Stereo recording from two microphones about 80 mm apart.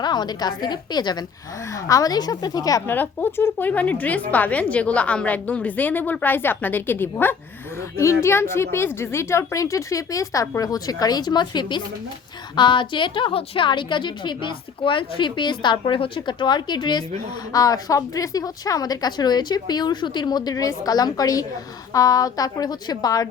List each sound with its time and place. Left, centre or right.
0.0 s a woman's voice: left
1.7 s speech: left
2.8 s a woman's voice: left
7.8 s a woman's voice: left
12.5 s a woman's voice: left
17.5 s speech: left